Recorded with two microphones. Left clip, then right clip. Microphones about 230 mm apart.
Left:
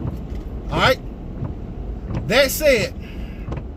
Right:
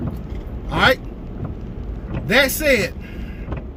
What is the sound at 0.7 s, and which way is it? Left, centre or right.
Speech, centre.